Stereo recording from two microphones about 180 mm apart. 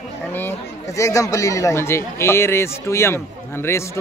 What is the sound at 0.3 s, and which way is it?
Speech, 10° left (ahead or behind).